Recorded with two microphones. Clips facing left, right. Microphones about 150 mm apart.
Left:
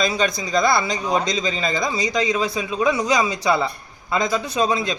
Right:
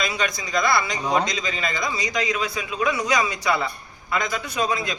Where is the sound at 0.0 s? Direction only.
30° left (ahead or behind).